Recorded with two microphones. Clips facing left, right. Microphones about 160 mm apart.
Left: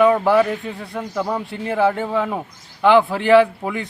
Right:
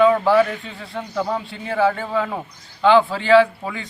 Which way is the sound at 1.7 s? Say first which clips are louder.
Left 1 dB; 15° left (ahead or behind).